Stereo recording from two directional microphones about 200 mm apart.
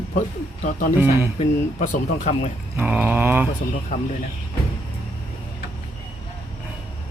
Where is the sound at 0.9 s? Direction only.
10° right (ahead or behind).